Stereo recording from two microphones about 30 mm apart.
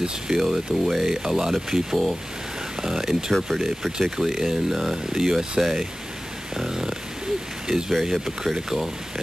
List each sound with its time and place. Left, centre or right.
0.4 s speech: centre